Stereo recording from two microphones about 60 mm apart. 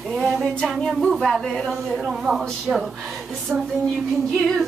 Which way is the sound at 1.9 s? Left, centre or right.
Centre.